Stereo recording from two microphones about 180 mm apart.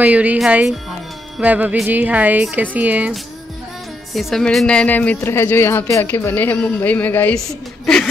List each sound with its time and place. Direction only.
0.0 s a woman's voice: 10° right (ahead or behind)